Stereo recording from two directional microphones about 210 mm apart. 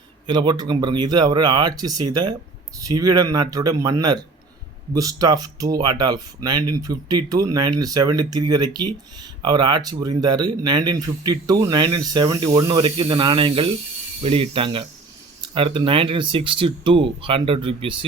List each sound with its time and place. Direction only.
0.3 s speech: 20° right (ahead or behind)